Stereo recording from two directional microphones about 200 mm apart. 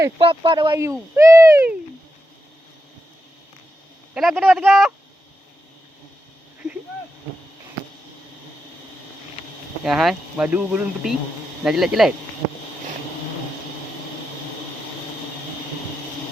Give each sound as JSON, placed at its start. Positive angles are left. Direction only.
{"t": 0.2, "sound": "speech", "side_deg": -25}
{"t": 4.1, "sound": "speech", "side_deg": 0}
{"t": 9.8, "sound": "speech", "side_deg": 0}